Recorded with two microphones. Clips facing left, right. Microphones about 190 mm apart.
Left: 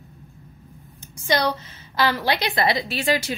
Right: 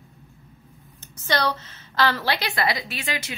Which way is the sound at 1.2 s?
10° left (ahead or behind).